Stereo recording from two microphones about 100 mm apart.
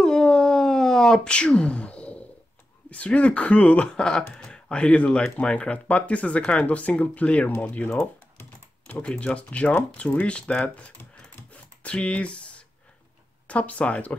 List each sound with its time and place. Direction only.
0.0 s a sound: 5° left (ahead or behind)
2.9 s speech: 15° left (ahead or behind)
8.4 s typing: 20° left (ahead or behind)
9.1 s speech: 10° left (ahead or behind)